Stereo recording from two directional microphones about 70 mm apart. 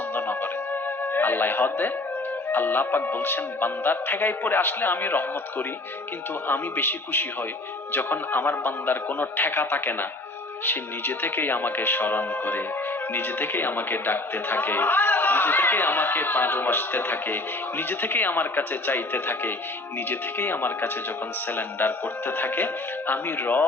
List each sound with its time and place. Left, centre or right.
0.1 s music: left
2.5 s a man's voice: left